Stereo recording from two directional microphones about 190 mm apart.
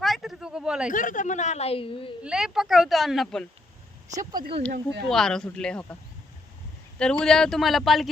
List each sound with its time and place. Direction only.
0.0 s a sound: centre (ahead or behind)
0.9 s a woman's voice: 45° left (ahead or behind); by 2.1 s 30° left (ahead or behind)
2.2 s speech: 5° right (ahead or behind)
4.2 s speech: 20° right (ahead or behind)
5.0 s speech: centre (ahead or behind)
7.0 s speech: 5° left (ahead or behind)